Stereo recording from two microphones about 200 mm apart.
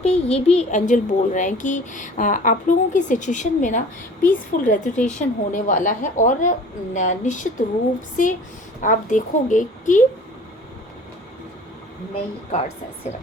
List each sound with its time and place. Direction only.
0.0 s speech: 35° left (ahead or behind)
12.5 s speech: 35° left (ahead or behind)